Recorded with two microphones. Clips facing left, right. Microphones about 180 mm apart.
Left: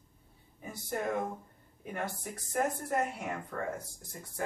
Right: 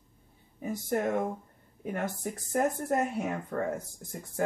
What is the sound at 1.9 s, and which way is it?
Speech, 40° right (ahead or behind).